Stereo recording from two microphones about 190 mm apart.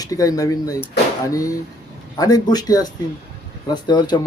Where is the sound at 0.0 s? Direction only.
20° left (ahead or behind).